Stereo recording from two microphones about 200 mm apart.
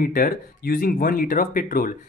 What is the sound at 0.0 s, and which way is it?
Speech, 45° left (ahead or behind).